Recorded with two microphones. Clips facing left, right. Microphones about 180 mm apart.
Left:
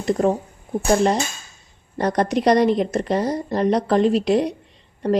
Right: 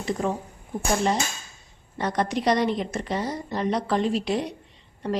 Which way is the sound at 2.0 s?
40° left (ahead or behind).